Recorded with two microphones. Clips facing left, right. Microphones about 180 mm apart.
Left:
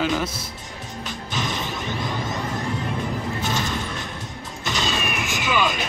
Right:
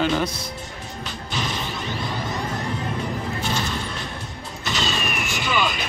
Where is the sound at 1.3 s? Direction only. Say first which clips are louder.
Even; 20° left (ahead or behind).